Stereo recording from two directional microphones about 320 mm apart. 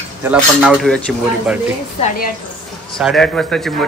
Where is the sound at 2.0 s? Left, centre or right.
Left.